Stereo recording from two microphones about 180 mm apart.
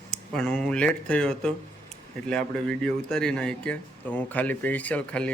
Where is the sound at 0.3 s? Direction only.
5° left (ahead or behind).